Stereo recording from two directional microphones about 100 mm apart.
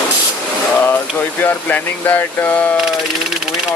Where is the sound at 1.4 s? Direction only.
20° left (ahead or behind).